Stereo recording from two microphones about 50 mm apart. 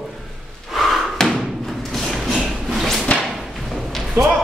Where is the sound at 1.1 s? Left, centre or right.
Centre.